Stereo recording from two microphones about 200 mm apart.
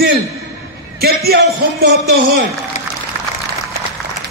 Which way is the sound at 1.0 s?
50° right (ahead or behind).